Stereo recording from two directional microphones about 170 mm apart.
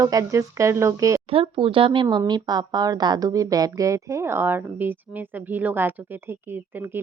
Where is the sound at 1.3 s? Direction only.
30° right (ahead or behind); by 6.4 s 10° right (ahead or behind).